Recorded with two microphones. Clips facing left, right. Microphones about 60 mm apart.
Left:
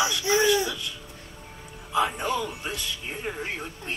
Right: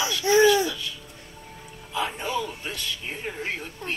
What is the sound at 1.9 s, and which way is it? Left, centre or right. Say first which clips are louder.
Speech: left 4 dB; centre.